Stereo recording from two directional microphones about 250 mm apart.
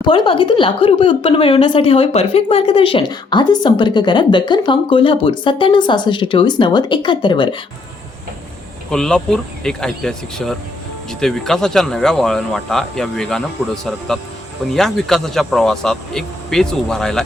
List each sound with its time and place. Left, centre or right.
0.0 s a woman's voice: left
8.9 s speech: centre